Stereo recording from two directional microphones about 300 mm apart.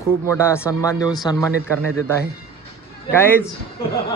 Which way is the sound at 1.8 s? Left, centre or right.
Right.